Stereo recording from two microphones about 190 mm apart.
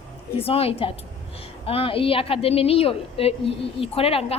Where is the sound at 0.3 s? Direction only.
30° left (ahead or behind).